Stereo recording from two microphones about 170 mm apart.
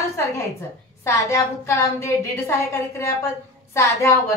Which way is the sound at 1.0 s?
20° left (ahead or behind).